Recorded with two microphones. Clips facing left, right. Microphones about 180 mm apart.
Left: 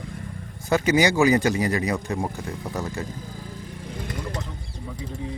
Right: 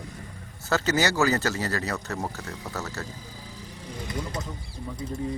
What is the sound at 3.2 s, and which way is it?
Vehicle, 55° left (ahead or behind).